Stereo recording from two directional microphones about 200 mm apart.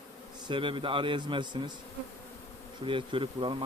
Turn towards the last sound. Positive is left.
turn(degrees=-25)  # may be behind; listen again after turning